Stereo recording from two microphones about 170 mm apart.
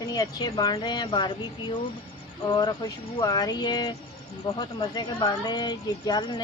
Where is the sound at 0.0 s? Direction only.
20° left (ahead or behind).